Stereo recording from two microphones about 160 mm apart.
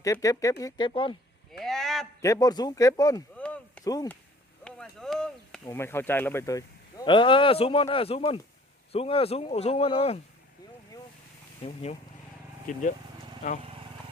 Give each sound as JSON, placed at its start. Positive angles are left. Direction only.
{"t": 0.0, "sound": "speech", "side_deg": 20}
{"t": 1.5, "sound": "a sound", "side_deg": 0}
{"t": 2.2, "sound": "speech", "side_deg": 20}
{"t": 3.3, "sound": "a sound", "side_deg": 10}
{"t": 3.8, "sound": "speech", "side_deg": 25}
{"t": 4.6, "sound": "a sound", "side_deg": 5}
{"t": 5.6, "sound": "speech", "side_deg": 15}
{"t": 11.6, "sound": "speech", "side_deg": 40}
{"t": 12.7, "sound": "speech", "side_deg": 55}